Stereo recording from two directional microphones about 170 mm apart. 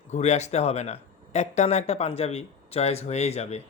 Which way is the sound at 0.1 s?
40° left (ahead or behind).